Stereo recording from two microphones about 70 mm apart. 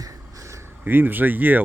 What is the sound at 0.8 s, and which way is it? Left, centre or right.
Speech, right.